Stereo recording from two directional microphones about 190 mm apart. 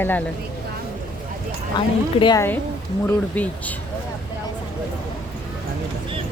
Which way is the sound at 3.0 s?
10° left (ahead or behind).